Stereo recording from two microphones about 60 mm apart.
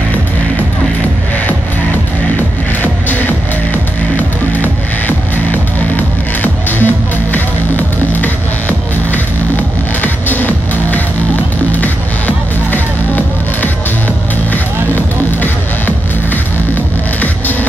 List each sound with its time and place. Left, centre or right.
3.7 s music: left